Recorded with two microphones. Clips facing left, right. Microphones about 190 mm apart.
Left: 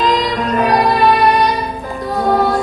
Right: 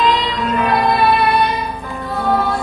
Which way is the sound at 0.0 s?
40° left (ahead or behind).